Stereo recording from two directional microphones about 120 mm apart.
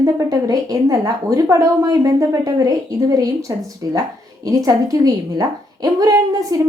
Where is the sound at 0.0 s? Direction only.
30° right (ahead or behind).